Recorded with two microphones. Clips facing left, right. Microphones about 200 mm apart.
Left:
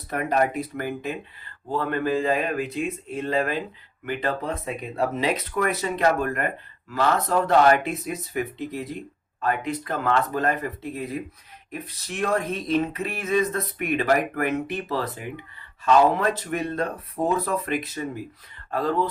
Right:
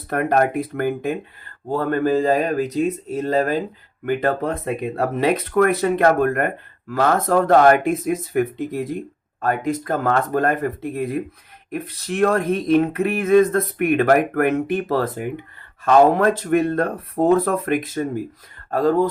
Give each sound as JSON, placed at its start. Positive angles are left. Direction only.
{"t": 0.1, "sound": "speech", "side_deg": -55}